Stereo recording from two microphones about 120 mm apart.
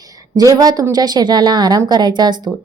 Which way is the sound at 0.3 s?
35° right (ahead or behind).